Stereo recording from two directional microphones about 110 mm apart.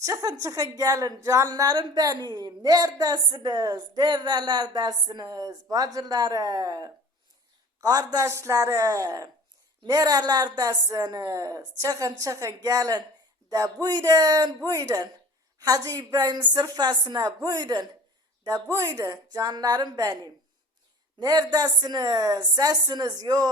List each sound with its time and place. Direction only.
0.0 s a woman's voice: 30° right (ahead or behind)
18.4 s a woman's voice: 30° right (ahead or behind)
21.2 s a woman's voice: 35° right (ahead or behind)